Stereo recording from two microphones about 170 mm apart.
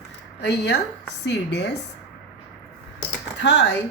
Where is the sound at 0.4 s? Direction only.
80° left.